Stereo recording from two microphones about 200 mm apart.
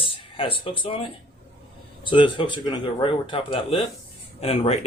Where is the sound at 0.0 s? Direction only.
25° left (ahead or behind).